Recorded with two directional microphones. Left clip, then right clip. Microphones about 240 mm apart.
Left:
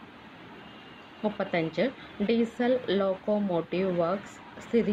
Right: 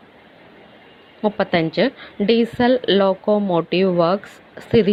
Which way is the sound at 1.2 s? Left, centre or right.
Right.